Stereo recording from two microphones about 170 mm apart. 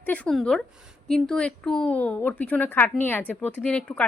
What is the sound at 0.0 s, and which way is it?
A woman's voice, 5° left (ahead or behind).